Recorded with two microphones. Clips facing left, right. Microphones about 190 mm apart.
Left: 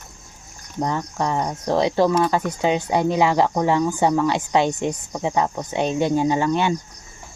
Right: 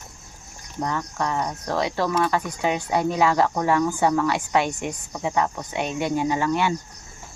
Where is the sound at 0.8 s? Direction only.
30° left (ahead or behind).